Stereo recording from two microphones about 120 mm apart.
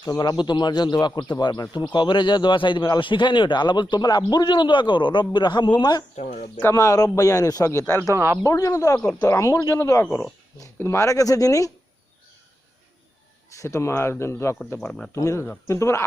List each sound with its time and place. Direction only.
0.0 s speech: 30° left (ahead or behind)
6.1 s speech: 70° left (ahead or behind)
6.6 s speech: 25° left (ahead or behind)
8.1 s speech: 25° right (ahead or behind)
8.4 s speech: 30° left (ahead or behind)
13.5 s speech: 25° left (ahead or behind)
14.8 s speech: 5° left (ahead or behind)
15.1 s speech: 25° left (ahead or behind)